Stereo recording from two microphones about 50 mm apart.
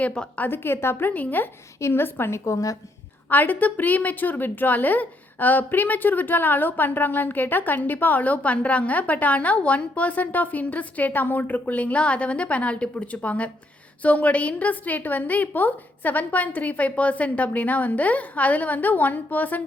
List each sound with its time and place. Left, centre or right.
0.3 s a woman's voice: left
1.0 s a woman's voice: left
1.9 s a woman's voice: left
3.2 s a woman's voice: left